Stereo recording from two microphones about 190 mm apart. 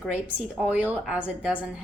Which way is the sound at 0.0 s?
5° right (ahead or behind).